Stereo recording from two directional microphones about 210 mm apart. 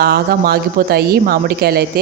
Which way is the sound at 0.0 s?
45° right (ahead or behind).